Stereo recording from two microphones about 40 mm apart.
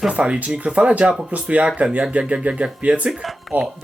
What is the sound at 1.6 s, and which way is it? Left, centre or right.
Speech, right.